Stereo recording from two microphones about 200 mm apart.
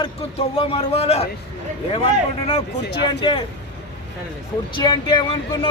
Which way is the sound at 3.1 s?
25° left (ahead or behind).